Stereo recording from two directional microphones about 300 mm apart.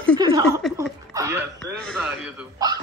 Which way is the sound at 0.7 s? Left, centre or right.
Centre.